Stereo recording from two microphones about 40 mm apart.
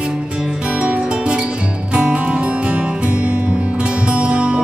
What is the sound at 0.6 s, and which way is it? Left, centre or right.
Music, right.